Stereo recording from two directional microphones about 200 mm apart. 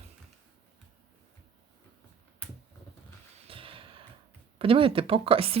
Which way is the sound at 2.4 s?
5° left (ahead or behind).